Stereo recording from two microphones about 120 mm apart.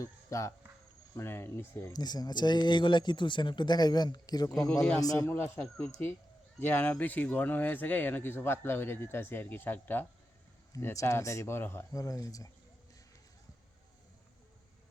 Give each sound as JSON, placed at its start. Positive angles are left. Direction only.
{"t": 0.0, "sound": "speech", "side_deg": 25}
{"t": 1.9, "sound": "speech", "side_deg": 35}
{"t": 5.3, "sound": "speech", "side_deg": 15}
{"t": 10.7, "sound": "speech", "side_deg": 25}